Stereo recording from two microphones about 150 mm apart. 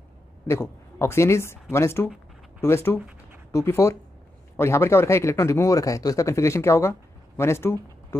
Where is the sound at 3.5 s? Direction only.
15° left (ahead or behind).